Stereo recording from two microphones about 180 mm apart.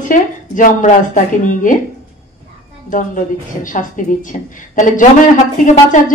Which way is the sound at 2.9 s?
45° left (ahead or behind).